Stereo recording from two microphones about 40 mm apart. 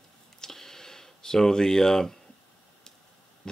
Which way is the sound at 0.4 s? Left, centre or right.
Centre.